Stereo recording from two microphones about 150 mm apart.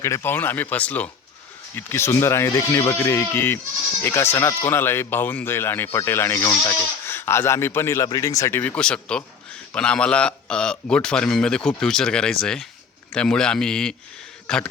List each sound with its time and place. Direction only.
0.0 s a man's voice: 15° left (ahead or behind)